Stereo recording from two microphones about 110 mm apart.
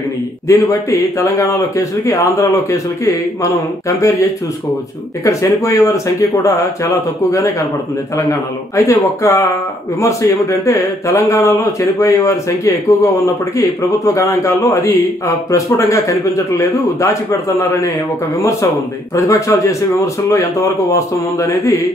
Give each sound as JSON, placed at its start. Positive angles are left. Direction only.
{"t": 0.5, "sound": "a man's voice", "side_deg": 30}
{"t": 5.2, "sound": "a man's voice", "side_deg": 30}
{"t": 8.3, "sound": "a man's voice", "side_deg": 30}